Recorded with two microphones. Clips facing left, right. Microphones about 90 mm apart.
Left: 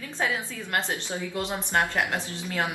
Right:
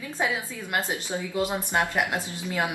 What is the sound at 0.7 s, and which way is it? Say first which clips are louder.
Speech: right 1 dB; 10° right (ahead or behind).